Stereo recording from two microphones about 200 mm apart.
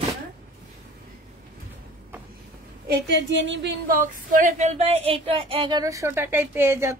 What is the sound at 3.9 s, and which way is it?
A woman's voice, 45° right (ahead or behind).